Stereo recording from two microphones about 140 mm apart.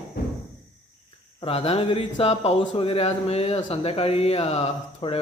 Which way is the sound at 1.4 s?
45° left (ahead or behind).